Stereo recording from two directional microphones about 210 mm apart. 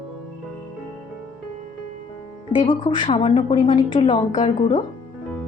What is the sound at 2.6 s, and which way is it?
A woman's voice, 25° left (ahead or behind).